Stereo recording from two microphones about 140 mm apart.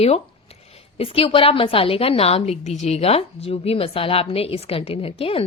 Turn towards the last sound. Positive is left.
turn(degrees=45)  # may be behind; listen again after turning